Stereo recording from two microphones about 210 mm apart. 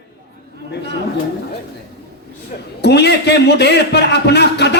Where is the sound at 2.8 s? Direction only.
50° left (ahead or behind).